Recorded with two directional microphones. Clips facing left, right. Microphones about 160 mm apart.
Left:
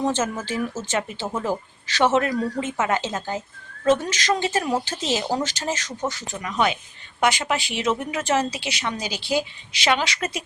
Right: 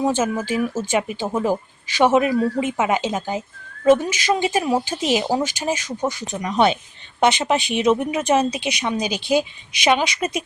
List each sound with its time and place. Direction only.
0.0 s speech: 10° right (ahead or behind)
6.5 s speech: 30° right (ahead or behind); by 10.4 s 15° right (ahead or behind)